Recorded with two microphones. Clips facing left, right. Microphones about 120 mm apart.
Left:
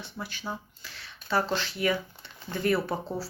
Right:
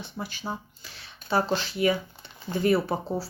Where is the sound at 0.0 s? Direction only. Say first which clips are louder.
Right 2 dB; 15° right (ahead or behind).